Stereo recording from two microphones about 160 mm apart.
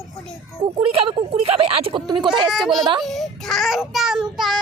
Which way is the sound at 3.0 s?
Centre (ahead or behind).